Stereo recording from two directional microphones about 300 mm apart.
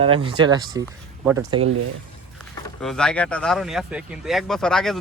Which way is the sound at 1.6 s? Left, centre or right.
Right.